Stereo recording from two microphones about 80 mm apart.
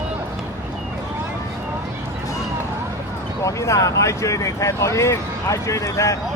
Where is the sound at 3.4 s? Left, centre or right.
Left.